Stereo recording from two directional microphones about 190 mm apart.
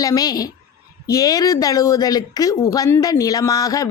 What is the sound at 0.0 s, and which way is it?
Speech, 20° left (ahead or behind).